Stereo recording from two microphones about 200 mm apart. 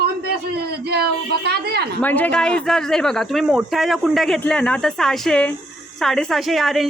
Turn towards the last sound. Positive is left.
turn(degrees=0)  # may be behind; listen again after turning